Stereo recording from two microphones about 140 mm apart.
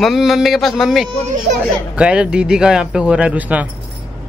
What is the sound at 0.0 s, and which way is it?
Speech, centre (ahead or behind).